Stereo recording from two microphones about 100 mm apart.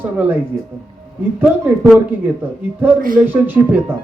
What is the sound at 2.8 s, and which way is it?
Speech, 20° right (ahead or behind).